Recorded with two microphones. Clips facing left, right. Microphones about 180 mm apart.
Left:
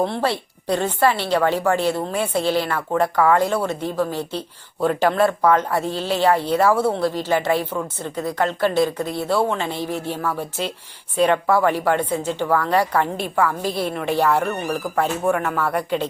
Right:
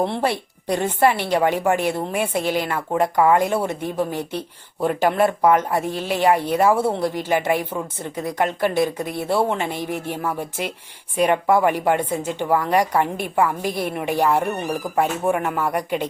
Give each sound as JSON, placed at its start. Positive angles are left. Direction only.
{"t": 0.0, "sound": "speech", "side_deg": -20}